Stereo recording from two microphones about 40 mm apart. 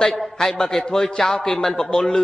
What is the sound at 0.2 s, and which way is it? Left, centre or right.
A woman's voice, centre.